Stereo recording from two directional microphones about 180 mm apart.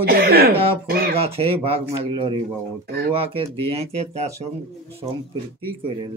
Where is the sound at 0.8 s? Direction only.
55° right (ahead or behind).